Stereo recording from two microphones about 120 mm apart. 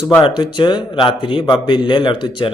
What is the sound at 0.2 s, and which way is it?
A man's voice, 40° left (ahead or behind).